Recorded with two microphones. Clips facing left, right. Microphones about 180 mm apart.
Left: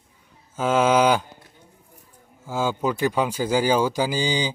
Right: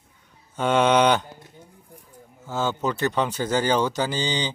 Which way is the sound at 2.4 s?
10° left (ahead or behind).